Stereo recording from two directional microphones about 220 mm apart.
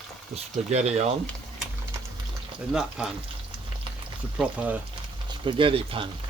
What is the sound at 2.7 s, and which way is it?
Speech, 5° right (ahead or behind).